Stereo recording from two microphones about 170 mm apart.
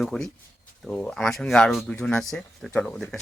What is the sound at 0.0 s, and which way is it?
Speech, 5° left (ahead or behind).